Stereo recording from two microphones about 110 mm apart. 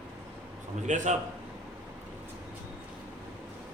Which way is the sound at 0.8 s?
90° right.